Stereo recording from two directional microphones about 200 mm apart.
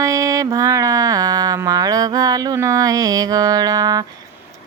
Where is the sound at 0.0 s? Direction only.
15° right (ahead or behind).